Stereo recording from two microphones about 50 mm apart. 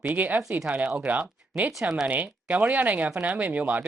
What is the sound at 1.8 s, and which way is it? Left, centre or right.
Speech, centre.